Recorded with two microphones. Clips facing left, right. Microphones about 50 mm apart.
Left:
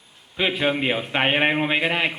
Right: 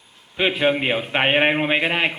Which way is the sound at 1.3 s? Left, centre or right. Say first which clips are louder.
Right 3 dB; right.